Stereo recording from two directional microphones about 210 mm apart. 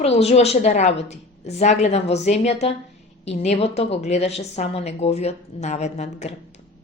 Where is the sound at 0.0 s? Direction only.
30° left (ahead or behind).